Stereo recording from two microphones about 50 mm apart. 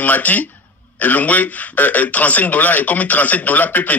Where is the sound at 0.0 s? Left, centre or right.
Left.